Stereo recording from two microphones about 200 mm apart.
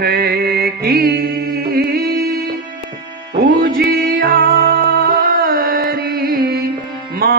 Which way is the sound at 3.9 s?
45° right (ahead or behind).